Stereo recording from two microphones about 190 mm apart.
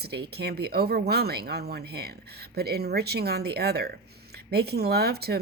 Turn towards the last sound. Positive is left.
turn(degrees=-55)  # may be behind; listen again after turning